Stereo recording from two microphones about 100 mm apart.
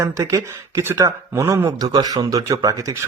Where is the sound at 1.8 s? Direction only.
40° right (ahead or behind).